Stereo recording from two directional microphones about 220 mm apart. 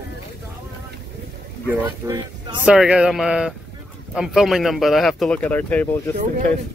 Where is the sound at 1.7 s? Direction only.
10° right (ahead or behind); by 6.0 s 10° left (ahead or behind).